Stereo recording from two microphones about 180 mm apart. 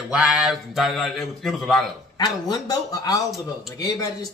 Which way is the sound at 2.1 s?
20° left (ahead or behind).